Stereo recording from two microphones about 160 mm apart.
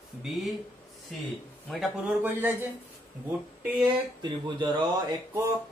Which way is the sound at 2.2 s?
10° right (ahead or behind).